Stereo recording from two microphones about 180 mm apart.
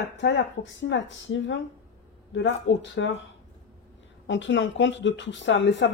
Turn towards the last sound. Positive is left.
turn(degrees=80)